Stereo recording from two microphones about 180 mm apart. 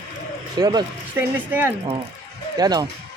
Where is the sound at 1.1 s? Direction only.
10° right (ahead or behind).